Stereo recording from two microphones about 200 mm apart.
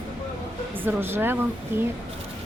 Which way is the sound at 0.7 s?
10° right (ahead or behind).